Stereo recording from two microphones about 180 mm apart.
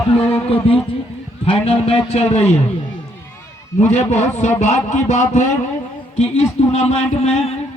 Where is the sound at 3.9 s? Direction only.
40° left (ahead or behind).